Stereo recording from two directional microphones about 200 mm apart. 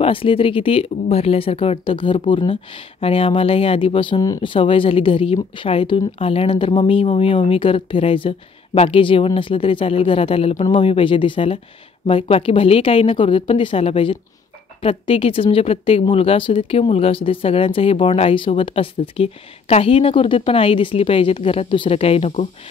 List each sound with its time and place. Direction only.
0.0 s speech: 25° left (ahead or behind)